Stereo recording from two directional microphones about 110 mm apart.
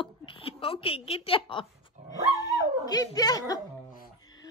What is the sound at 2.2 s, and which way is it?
A woman's voice, 35° left (ahead or behind).